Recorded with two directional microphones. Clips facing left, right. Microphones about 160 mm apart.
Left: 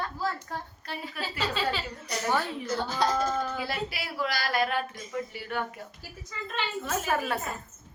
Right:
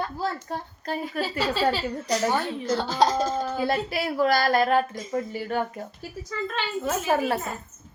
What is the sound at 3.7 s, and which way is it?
Speech, 50° right (ahead or behind).